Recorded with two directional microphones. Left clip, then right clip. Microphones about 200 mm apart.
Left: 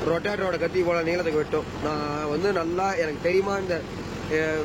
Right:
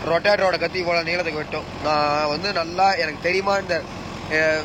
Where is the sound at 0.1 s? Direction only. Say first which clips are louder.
Right 11 dB; 10° left (ahead or behind).